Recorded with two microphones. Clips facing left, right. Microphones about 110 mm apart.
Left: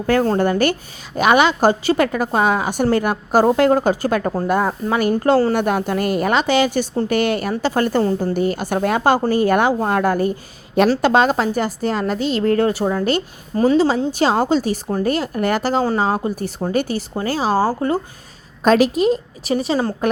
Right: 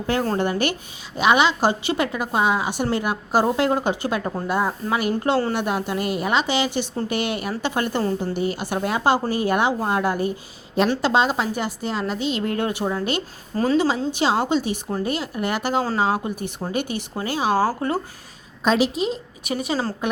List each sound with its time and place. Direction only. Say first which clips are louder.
0.1 s a woman's voice: left 6 dB; 40° left (ahead or behind)
5.5 s a woman's voice: left 5 dB; 50° left (ahead or behind)
13.6 s a woman's voice: left 5 dB; 30° left (ahead or behind)
17.6 s speech: left 3 dB; 20° left (ahead or behind)
18.6 s a woman's voice: left 6 dB; 50° left (ahead or behind)
19.5 s a woman's voice: left 5 dB; 30° left (ahead or behind)